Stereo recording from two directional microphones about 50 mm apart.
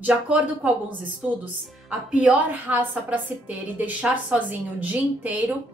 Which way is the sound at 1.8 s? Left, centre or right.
Right.